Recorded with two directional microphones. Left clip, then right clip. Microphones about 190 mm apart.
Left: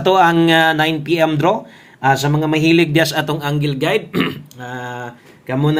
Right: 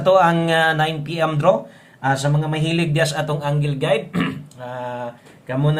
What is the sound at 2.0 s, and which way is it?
Speech, 40° left (ahead or behind).